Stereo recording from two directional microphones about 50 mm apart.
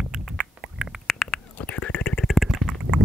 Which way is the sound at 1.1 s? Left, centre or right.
Centre.